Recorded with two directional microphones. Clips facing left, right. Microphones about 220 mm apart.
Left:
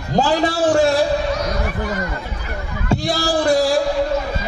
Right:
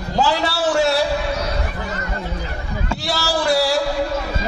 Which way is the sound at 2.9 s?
45° left (ahead or behind).